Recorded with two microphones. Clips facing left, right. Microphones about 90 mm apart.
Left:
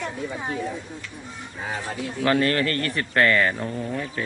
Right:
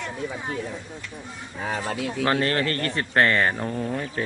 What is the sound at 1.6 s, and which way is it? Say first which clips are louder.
Speech: right 3 dB; 75° right (ahead or behind).